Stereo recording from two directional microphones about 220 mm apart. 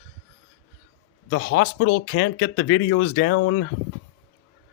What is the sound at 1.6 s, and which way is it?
Speech, 85° left.